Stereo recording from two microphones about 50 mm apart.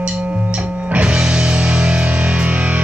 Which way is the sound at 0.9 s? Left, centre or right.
Right.